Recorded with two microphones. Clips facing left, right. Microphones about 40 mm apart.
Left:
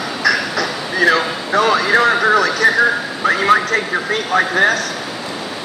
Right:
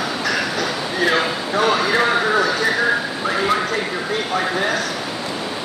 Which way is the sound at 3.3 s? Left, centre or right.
Left.